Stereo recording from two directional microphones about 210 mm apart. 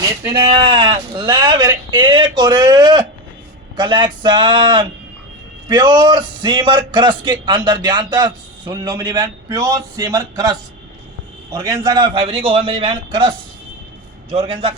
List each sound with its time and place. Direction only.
0.0 s a man's voice: 15° right (ahead or behind)